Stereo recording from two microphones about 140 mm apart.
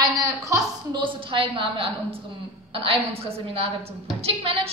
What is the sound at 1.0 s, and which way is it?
A woman's voice, 35° right (ahead or behind).